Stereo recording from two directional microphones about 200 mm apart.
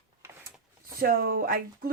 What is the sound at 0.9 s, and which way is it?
Speech, 45° right (ahead or behind).